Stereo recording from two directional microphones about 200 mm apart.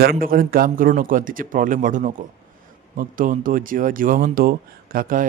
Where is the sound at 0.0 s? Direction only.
45° right (ahead or behind).